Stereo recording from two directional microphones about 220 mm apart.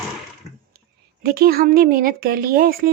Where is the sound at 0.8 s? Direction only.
45° right (ahead or behind).